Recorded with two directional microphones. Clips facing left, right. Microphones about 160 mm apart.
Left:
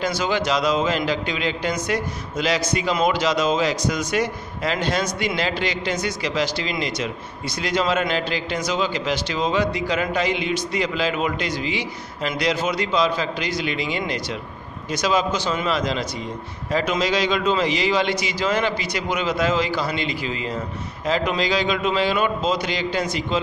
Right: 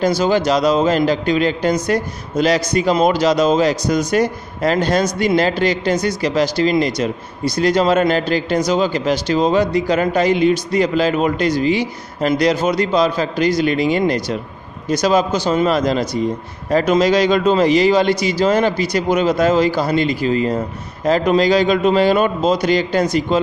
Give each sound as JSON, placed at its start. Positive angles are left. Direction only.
{"t": 0.0, "sound": "a man's voice", "side_deg": -40}